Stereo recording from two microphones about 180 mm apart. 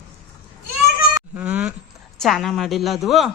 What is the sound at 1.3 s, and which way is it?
Speech, 10° right (ahead or behind).